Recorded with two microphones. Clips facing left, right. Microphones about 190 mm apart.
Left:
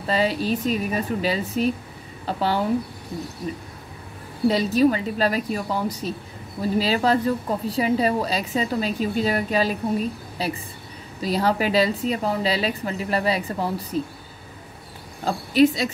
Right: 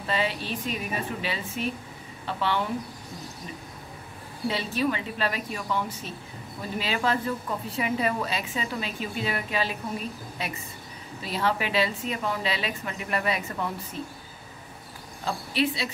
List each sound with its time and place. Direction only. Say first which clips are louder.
0.0 s a woman's voice: left 6 dB; 35° left (ahead or behind)
4.5 s a woman's voice: left 9 dB; 40° left (ahead or behind)
15.2 s speech: left 9 dB; 40° left (ahead or behind)